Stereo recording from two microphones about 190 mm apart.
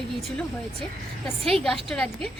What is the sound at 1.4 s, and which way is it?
Speech, centre (ahead or behind).